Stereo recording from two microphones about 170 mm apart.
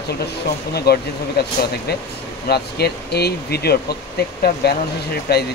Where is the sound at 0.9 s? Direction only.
75° left (ahead or behind).